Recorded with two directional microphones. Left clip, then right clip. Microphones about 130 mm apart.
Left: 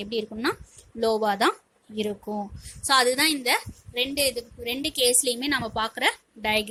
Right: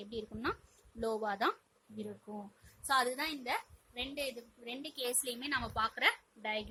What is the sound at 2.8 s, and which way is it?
A woman's voice, 45° left (ahead or behind).